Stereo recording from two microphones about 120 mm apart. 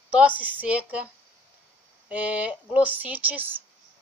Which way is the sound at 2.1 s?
10° right (ahead or behind).